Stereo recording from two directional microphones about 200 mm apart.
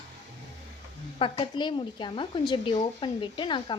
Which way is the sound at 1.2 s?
25° left (ahead or behind).